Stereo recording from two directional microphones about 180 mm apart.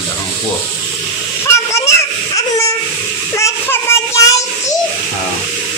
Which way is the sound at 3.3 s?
15° left (ahead or behind).